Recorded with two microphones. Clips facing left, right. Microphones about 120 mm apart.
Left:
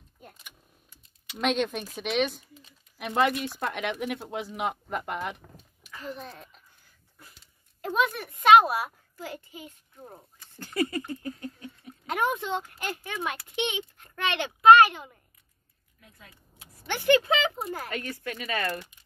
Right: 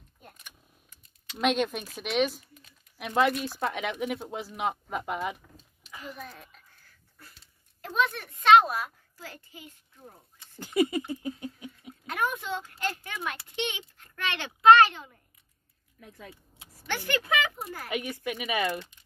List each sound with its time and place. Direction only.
1.4 s speech: centre (ahead or behind)
6.1 s speech: 25° left (ahead or behind)
7.8 s a child's voice: 10° left (ahead or behind)
10.6 s a sound: 15° right (ahead or behind)
12.4 s a child's voice: 20° left (ahead or behind)
16.8 s speech: 20° left (ahead or behind)
17.8 s speech: 15° right (ahead or behind)